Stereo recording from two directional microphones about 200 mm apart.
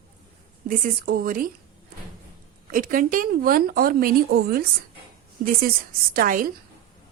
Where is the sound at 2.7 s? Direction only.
45° right (ahead or behind).